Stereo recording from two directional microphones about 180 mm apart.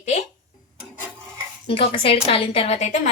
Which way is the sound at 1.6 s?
30° left (ahead or behind).